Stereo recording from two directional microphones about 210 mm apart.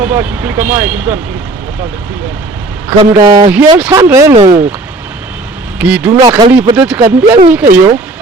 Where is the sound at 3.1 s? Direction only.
15° right (ahead or behind).